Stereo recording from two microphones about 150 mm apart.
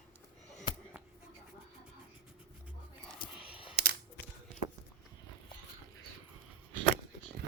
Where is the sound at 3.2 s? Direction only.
70° left (ahead or behind).